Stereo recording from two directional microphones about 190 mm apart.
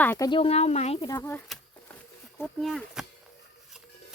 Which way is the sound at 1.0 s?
15° left (ahead or behind).